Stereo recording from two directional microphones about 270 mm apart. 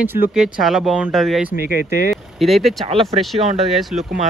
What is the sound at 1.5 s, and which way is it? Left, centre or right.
Speech, left.